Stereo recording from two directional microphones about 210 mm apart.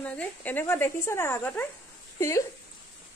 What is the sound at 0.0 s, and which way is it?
Speech, 5° left (ahead or behind).